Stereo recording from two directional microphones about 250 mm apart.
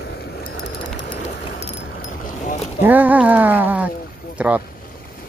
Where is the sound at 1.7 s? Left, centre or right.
Left.